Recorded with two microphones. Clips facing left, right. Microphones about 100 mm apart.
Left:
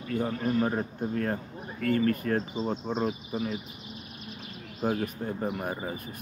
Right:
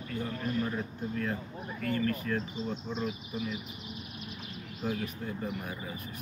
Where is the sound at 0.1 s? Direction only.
45° left (ahead or behind).